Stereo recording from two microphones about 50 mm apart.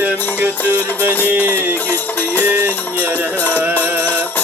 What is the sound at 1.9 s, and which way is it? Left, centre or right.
Music, left.